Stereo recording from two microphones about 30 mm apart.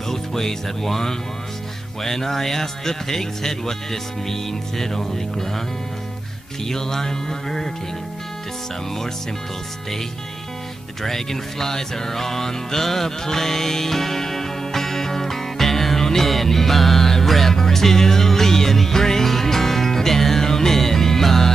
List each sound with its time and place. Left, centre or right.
0.1 s speech: centre
6.7 s speech: centre
11.0 s speech: centre
17.6 s music: centre